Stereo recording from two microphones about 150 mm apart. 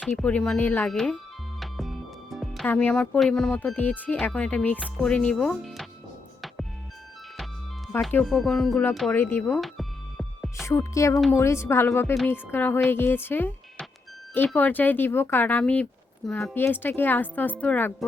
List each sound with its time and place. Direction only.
0.2 s speech: 5° left (ahead or behind)
1.5 s music: centre (ahead or behind)
2.6 s speech: 10° left (ahead or behind)
8.2 s speech: centre (ahead or behind)
9.1 s speech: 15° left (ahead or behind)
9.6 s music: centre (ahead or behind)
10.7 s speech: 20° left (ahead or behind)